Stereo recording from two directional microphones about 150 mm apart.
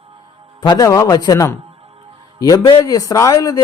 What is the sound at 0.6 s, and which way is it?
Speech, 25° left (ahead or behind).